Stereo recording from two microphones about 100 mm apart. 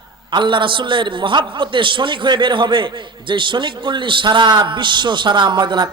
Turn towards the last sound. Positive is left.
turn(degrees=-50)  # may be behind; listen again after turning